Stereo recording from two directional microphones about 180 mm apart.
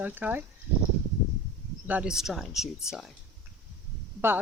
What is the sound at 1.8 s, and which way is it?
Speech, 5° right (ahead or behind).